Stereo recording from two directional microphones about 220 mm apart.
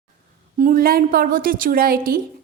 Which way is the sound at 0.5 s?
40° right (ahead or behind).